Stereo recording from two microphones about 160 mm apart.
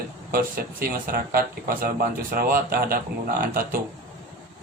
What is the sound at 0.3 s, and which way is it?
Speech, 60° right (ahead or behind).